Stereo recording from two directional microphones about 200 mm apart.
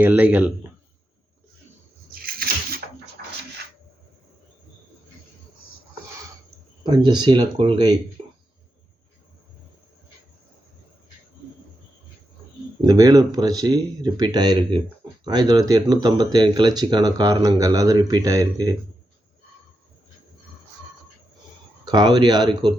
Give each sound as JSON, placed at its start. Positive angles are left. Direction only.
{"t": 0.0, "sound": "a man's voice", "side_deg": -10}
{"t": 2.2, "sound": "a sound", "side_deg": -50}
{"t": 6.8, "sound": "speech", "side_deg": -20}
{"t": 12.8, "sound": "speech", "side_deg": -20}
{"t": 21.8, "sound": "speech", "side_deg": -20}